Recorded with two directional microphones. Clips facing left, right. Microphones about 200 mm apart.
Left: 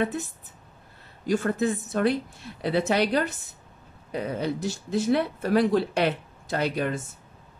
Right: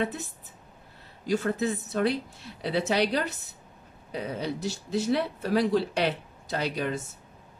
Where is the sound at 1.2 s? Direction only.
50° left (ahead or behind).